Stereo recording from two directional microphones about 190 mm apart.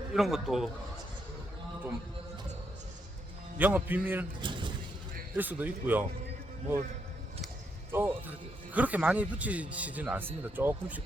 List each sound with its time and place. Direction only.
0.1 s a man's voice: centre (ahead or behind)
3.6 s speech: 10° right (ahead or behind)
4.4 s a sound: 25° right (ahead or behind)
5.4 s speech: 10° right (ahead or behind)
7.9 s speech: 10° right (ahead or behind)